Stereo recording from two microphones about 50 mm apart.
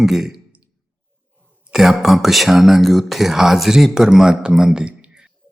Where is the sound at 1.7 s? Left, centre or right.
Centre.